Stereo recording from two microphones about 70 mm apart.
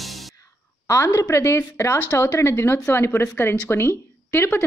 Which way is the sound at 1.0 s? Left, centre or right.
Left.